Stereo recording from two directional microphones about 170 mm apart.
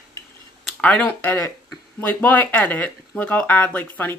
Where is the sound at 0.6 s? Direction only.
5° left (ahead or behind).